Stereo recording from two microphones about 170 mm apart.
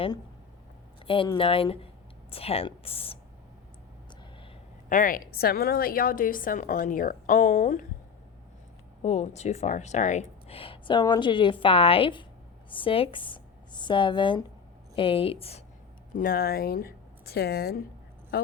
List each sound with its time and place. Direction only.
1.0 s speech: 30° left (ahead or behind)
4.9 s a woman's voice: 50° left (ahead or behind)
9.0 s speech: 40° left (ahead or behind)
16.1 s speech: 60° left (ahead or behind)